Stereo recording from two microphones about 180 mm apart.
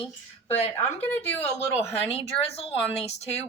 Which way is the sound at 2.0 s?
35° left (ahead or behind).